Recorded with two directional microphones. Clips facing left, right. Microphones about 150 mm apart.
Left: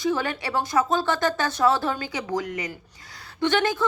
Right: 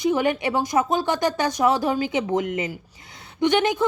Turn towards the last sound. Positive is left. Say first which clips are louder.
# right 3 dB
turn(degrees=-20)  # may be behind; listen again after turning